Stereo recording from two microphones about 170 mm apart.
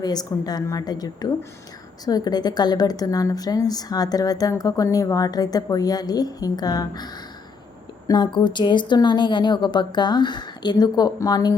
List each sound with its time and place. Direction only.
0.0 s a woman's voice: 25° left (ahead or behind)